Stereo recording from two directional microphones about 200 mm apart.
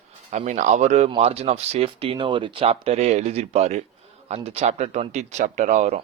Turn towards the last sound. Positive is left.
turn(degrees=-35)  # may be behind; listen again after turning